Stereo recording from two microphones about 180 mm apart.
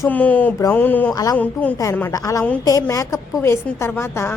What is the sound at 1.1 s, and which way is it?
A woman's voice, 20° left (ahead or behind).